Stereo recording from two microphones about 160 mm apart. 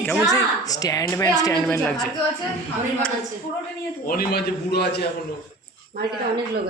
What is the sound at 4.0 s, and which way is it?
A man's voice, 70° left (ahead or behind).